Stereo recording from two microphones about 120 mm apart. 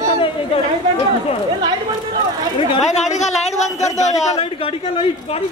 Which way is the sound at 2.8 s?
75° left (ahead or behind).